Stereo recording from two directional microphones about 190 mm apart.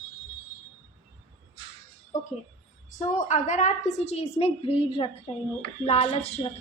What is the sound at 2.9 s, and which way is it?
A woman's voice, 40° left (ahead or behind).